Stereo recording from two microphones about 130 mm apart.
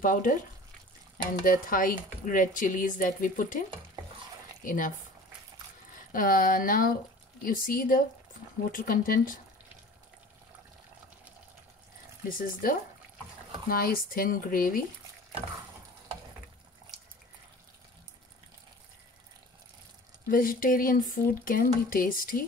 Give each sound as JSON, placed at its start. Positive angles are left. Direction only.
{"t": 0.0, "sound": "speech", "side_deg": 90}
{"t": 4.6, "sound": "speech", "side_deg": 90}
{"t": 6.1, "sound": "speech", "side_deg": 90}
{"t": 12.4, "sound": "speech", "side_deg": 90}
{"t": 13.9, "sound": "speech", "side_deg": 90}
{"t": 20.2, "sound": "speech", "side_deg": 90}